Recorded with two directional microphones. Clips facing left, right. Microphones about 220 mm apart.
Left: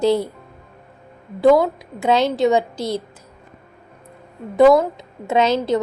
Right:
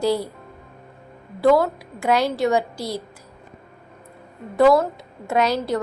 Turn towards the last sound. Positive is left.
turn(degrees=25)  # may be behind; listen again after turning